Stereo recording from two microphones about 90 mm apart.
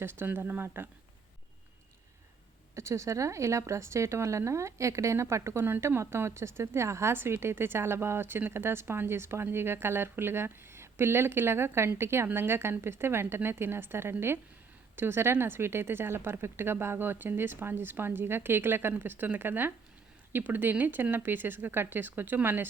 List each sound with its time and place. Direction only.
0.0 s speech: 25° right (ahead or behind)
2.7 s speech: 35° right (ahead or behind)